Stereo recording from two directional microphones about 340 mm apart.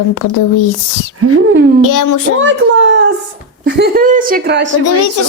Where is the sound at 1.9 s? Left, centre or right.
Left.